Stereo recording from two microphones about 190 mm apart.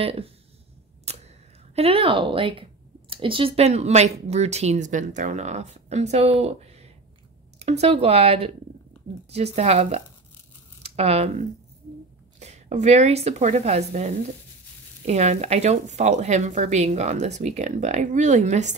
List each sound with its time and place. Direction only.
0.0 s speech: 30° right (ahead or behind)
1.1 s a sound: 35° right (ahead or behind)
1.8 s speech: 30° right (ahead or behind)